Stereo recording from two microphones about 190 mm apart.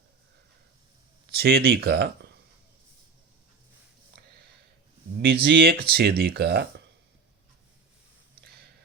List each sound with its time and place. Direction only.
1.3 s speech: 55° right (ahead or behind)
5.2 s speech: 55° right (ahead or behind)
8.4 s a sound: 55° right (ahead or behind)